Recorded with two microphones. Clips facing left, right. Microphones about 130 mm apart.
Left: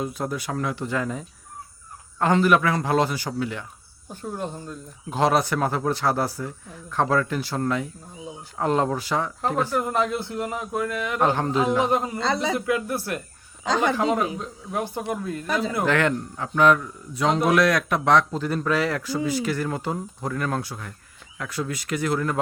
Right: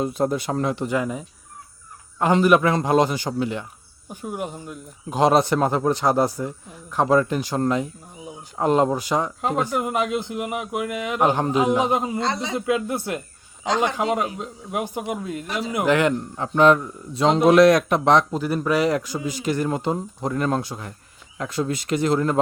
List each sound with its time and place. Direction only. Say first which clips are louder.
0.0 s speech: right 6 dB; 25° right (ahead or behind)
0.9 s speech: right 3 dB; 15° right (ahead or behind)
16.4 s speech: right 3 dB; 25° right (ahead or behind)